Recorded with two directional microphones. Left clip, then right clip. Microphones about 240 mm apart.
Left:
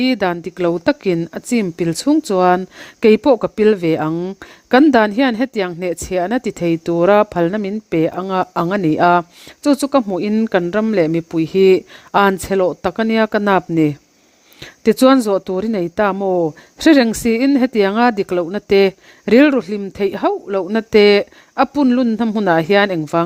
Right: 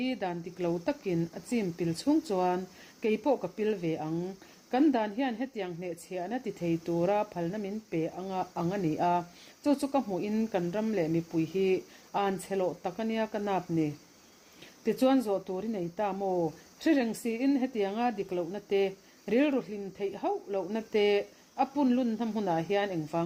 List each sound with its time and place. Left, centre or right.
0.0 s speech: left